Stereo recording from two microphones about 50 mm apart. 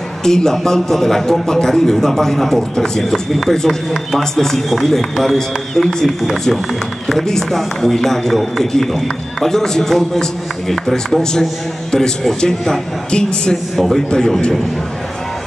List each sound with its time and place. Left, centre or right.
0.2 s a man's voice: centre
13.7 s a man's voice: centre